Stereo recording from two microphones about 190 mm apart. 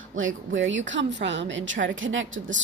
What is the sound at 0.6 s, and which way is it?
A woman's voice, 80° right.